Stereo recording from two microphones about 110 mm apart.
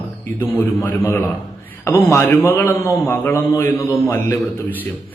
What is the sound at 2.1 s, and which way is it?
A man's voice, 20° left (ahead or behind).